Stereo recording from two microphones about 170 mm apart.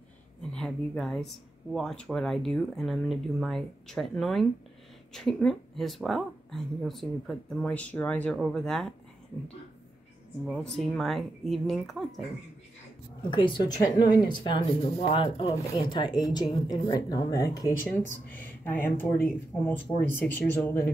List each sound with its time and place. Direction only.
0.4 s speech: 5° left (ahead or behind)
10.6 s speech: 5° left (ahead or behind)
13.3 s speech: 30° left (ahead or behind)
15.4 s speech: 20° left (ahead or behind)